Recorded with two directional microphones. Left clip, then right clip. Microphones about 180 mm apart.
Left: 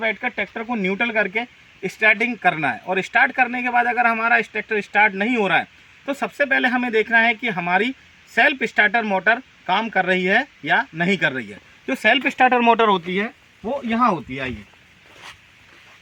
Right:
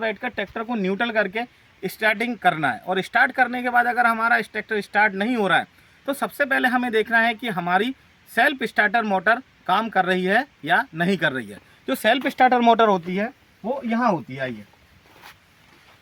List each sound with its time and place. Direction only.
0.0 s speech: 5° left (ahead or behind)
12.7 s speech: 30° right (ahead or behind)